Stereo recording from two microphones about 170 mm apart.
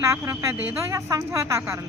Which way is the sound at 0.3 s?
15° right (ahead or behind).